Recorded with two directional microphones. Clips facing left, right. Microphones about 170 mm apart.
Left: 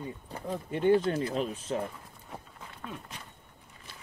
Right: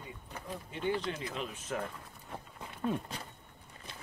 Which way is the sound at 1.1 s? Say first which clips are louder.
Left 8 dB; 35° left (ahead or behind).